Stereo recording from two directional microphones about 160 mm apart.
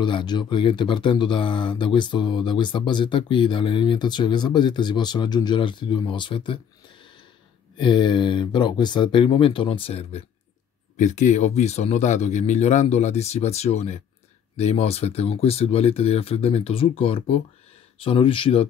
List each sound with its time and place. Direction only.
0.0 s speech: 30° left (ahead or behind)
7.7 s speech: 30° left (ahead or behind)
11.0 s a man's voice: 50° left (ahead or behind)